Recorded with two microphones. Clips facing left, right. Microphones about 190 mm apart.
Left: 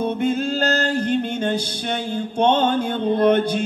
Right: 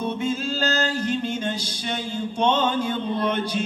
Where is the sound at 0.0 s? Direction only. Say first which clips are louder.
Left 5 dB; 55° left (ahead or behind).